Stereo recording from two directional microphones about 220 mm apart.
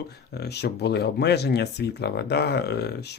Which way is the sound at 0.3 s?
50° left (ahead or behind).